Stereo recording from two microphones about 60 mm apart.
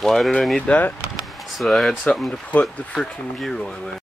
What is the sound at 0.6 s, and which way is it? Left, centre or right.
Speech, left.